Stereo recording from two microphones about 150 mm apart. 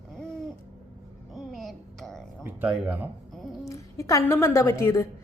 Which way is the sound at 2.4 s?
15° right (ahead or behind).